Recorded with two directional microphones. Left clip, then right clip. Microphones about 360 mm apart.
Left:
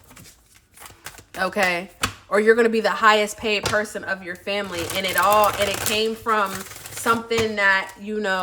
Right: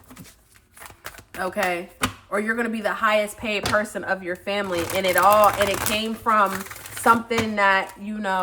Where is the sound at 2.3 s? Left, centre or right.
Centre.